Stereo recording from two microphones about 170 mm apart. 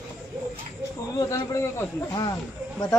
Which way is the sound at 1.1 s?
15° left (ahead or behind).